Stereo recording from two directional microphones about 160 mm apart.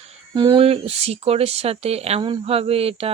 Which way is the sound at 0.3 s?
30° right (ahead or behind).